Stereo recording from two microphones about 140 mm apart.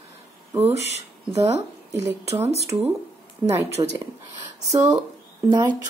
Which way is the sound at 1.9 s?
20° right (ahead or behind).